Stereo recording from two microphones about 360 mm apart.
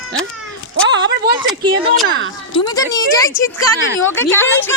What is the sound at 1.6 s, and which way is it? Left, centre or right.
Speech, centre.